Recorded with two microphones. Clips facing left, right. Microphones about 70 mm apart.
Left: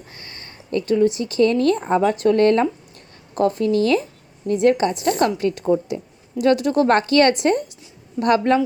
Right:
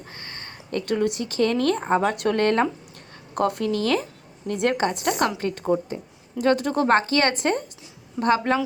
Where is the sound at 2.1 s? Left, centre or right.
Right.